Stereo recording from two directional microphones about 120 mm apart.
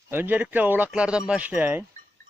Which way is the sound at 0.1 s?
15° right (ahead or behind).